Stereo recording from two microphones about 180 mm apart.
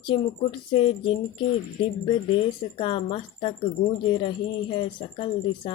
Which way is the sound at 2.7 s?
30° left (ahead or behind).